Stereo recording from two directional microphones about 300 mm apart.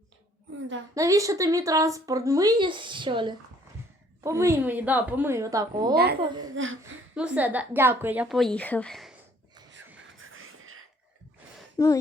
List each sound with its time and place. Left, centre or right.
0.9 s speech: centre
5.9 s a woman's voice: right
6.1 s speech: centre
7.2 s a woman's voice: centre
10.2 s a sound: right
11.8 s a sound: centre